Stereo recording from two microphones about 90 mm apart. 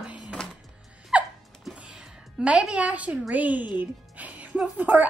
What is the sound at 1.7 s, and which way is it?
Music, 10° right (ahead or behind).